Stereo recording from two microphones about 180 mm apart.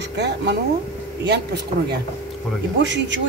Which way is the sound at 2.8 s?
85° right.